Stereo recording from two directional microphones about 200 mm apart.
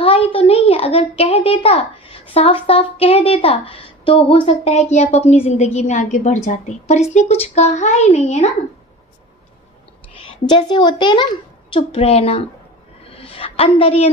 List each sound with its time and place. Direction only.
0.0 s a child's voice: 25° left (ahead or behind)
10.2 s a child's voice: 20° left (ahead or behind)
13.0 s a sound: 30° left (ahead or behind)